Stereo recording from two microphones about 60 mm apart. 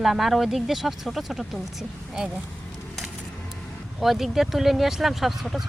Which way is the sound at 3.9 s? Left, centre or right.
Centre.